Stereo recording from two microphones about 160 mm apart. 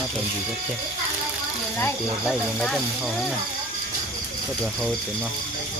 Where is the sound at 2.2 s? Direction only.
5° left (ahead or behind).